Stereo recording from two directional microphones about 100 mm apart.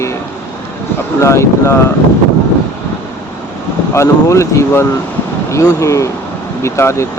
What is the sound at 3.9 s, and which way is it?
Speech, 30° left (ahead or behind).